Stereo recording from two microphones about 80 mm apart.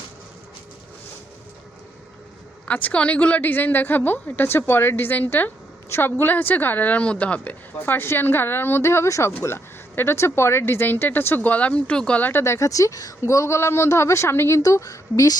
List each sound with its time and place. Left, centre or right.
2.6 s speech: centre
14.6 s a woman's voice: left